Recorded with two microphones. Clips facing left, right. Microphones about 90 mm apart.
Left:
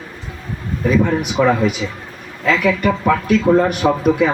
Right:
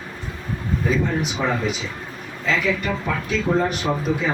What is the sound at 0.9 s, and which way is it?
Speech, 60° left (ahead or behind).